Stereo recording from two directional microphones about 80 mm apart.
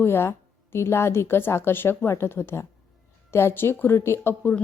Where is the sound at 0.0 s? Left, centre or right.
Left.